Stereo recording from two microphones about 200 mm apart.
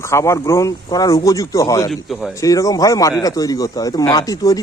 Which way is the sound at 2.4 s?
15° left (ahead or behind).